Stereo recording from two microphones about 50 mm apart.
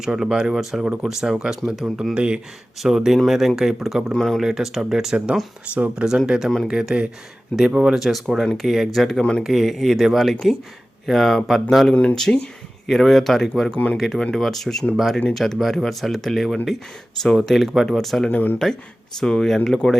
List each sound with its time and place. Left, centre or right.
0.0 s speech: centre
2.1 s speech: right
2.8 s speech: centre
4.1 s speech: centre
4.4 s speech: centre; by 6.1 s right
6.1 s speech: centre
7.9 s speech: centre
18.3 s speech: left
19.2 s speech: centre